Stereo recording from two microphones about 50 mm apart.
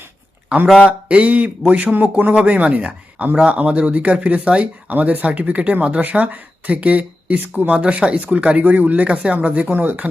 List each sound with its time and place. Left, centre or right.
0.9 s speech: right
2.3 s speech: right
4.9 s speech: right